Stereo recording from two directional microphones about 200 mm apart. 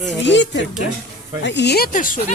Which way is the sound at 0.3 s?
65° left (ahead or behind).